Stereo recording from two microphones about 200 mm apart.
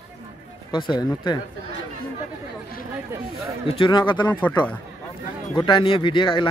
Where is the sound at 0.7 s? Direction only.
25° left (ahead or behind).